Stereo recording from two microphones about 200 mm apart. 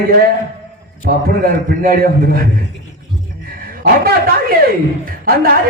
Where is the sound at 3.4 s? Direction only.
45° right (ahead or behind).